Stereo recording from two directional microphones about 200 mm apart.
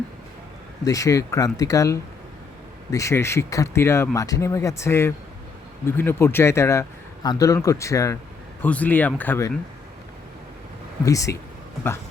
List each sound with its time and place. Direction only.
0.9 s speech: 15° left (ahead or behind)
11.0 s speech: 15° left (ahead or behind)